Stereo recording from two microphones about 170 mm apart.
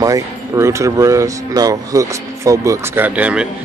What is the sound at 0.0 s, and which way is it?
Speech, 20° right (ahead or behind).